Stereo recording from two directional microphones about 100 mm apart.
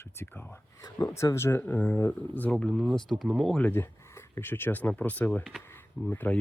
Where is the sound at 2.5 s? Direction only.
5° left (ahead or behind).